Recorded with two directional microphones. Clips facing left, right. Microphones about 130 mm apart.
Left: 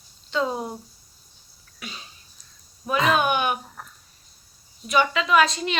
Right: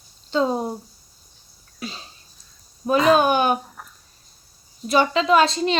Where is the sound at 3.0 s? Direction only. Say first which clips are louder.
Right 5 dB; 35° right (ahead or behind).